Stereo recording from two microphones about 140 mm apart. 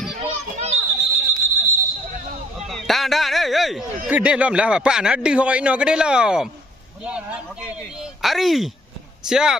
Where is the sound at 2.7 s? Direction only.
Centre (ahead or behind).